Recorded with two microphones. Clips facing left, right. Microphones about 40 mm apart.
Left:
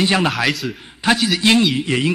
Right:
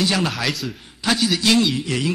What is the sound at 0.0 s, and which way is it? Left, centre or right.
A man's voice, left.